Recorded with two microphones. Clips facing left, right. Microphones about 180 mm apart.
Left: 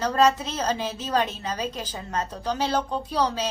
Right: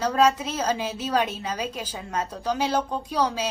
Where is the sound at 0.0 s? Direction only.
10° right (ahead or behind).